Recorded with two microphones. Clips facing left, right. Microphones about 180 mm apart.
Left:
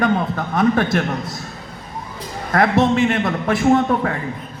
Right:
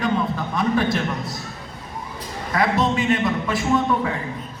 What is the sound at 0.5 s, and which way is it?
Speech, 55° left (ahead or behind).